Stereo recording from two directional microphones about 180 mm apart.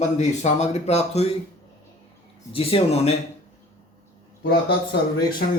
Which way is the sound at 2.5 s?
30° left (ahead or behind).